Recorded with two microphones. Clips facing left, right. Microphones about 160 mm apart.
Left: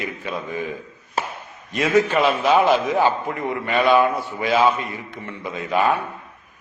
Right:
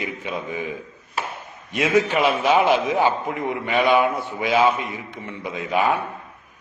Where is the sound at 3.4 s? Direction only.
15° right (ahead or behind).